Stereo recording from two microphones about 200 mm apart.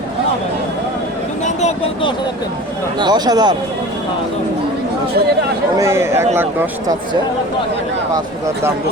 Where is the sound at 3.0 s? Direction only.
20° right (ahead or behind).